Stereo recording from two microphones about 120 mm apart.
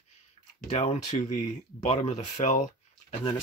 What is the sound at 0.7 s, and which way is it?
Speech, 80° left.